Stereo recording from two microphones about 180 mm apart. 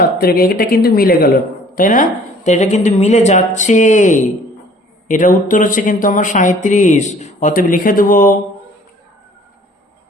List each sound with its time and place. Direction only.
0.0 s a woman's voice: 55° left (ahead or behind)